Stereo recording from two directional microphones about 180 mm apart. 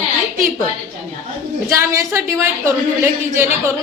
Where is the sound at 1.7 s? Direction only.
15° right (ahead or behind).